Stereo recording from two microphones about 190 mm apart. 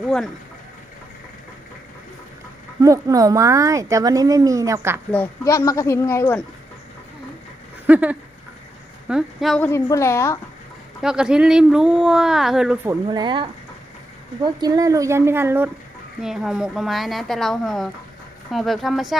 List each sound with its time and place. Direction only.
2.8 s speech: 15° right (ahead or behind)
5.1 s speech: 15° left (ahead or behind)
7.9 s speech: 10° right (ahead or behind)
9.6 s speech: 15° left (ahead or behind)
11.0 s speech: 5° right (ahead or behind)
13.1 s speech: 25° right (ahead or behind)
14.4 s speech: 20° right (ahead or behind); by 19.1 s centre (ahead or behind)